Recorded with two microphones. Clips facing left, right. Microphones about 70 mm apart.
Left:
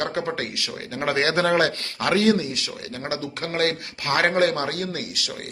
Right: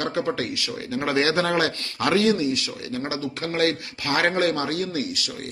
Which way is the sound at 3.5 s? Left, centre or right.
Left.